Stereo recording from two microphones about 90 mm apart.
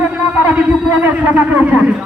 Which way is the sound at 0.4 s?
20° right (ahead or behind).